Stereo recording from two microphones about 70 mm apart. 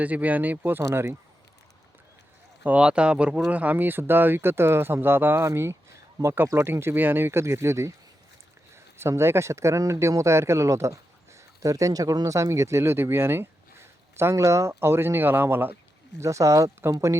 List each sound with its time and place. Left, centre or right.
0.0 s speech: right
2.8 s speech: centre; by 15.7 s right
16.2 s speech: right